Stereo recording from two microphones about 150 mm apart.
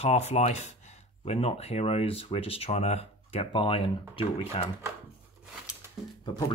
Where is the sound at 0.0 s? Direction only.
45° left (ahead or behind).